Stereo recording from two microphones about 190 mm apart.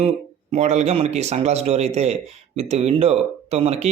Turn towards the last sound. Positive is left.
turn(degrees=-35)  # may be behind; listen again after turning